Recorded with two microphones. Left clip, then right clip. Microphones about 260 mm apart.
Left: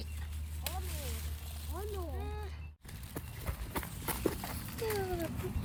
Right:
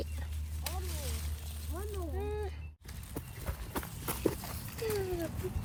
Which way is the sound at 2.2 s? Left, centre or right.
Centre.